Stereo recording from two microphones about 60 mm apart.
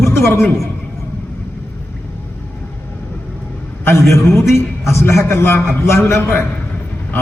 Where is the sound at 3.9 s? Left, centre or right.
Left.